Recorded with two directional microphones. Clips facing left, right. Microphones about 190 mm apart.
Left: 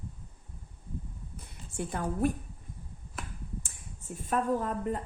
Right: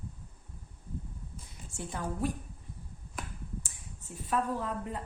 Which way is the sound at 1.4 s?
55° left (ahead or behind).